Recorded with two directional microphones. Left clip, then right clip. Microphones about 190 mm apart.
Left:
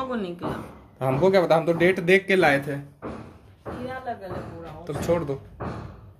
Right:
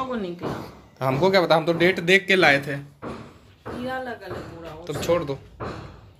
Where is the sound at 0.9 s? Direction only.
5° left (ahead or behind).